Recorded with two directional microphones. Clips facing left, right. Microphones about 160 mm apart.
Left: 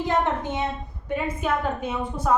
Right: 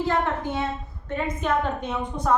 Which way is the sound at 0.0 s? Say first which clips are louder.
Left 1 dB; 20° left (ahead or behind).